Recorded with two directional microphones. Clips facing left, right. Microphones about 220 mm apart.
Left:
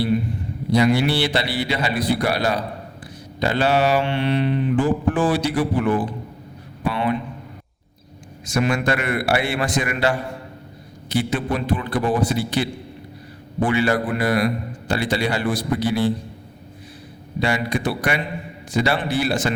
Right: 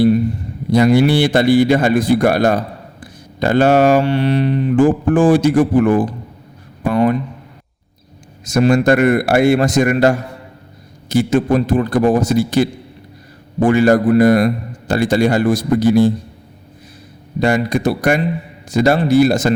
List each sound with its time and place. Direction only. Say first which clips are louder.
0.7 s a man's voice: right 6 dB; 50° right (ahead or behind)
8.4 s a man's voice: right 9 dB; 40° right (ahead or behind)
17.4 s a man's voice: right 7 dB; 45° right (ahead or behind)